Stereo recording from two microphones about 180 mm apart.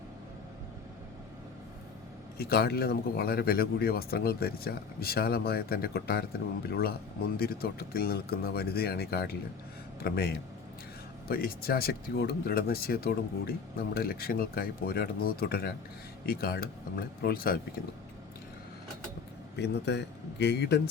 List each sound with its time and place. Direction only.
2.4 s speech: 60° left (ahead or behind)
19.5 s speech: 65° left (ahead or behind)